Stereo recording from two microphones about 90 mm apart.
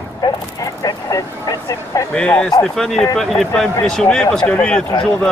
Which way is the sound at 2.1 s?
10° left (ahead or behind).